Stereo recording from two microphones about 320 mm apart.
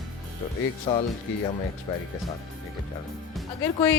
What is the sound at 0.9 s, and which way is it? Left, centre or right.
Speech, centre.